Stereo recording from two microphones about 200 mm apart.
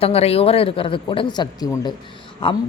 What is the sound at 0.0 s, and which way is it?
Speech, 30° left (ahead or behind).